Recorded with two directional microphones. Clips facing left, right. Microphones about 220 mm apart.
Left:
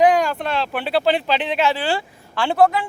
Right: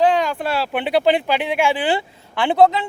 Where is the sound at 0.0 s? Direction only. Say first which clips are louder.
Left 1 dB; 10° left (ahead or behind).